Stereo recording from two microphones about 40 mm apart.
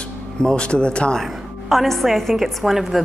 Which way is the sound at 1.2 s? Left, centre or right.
Centre.